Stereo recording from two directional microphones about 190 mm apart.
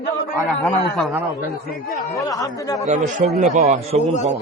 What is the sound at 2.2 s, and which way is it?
Speech, 20° left (ahead or behind).